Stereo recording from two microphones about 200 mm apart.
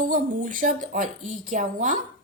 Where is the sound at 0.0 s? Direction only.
40° right (ahead or behind).